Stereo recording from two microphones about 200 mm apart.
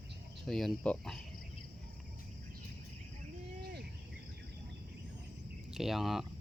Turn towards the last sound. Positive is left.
turn(degrees=0)  # may be behind; listen again after turning